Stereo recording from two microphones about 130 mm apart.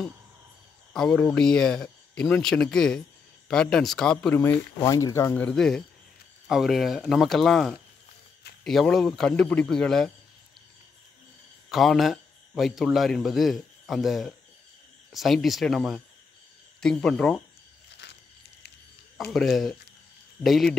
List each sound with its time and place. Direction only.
0.9 s speech: 5° left (ahead or behind)
4.4 s speech: 15° left (ahead or behind)
5.3 s speech: 10° left (ahead or behind)
11.7 s speech: centre (ahead or behind)
19.1 s speech: centre (ahead or behind)